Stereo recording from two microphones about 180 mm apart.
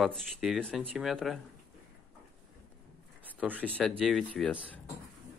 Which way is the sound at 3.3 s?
10° right (ahead or behind).